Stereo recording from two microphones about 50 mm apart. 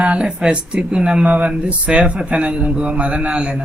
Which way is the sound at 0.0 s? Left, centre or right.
Centre.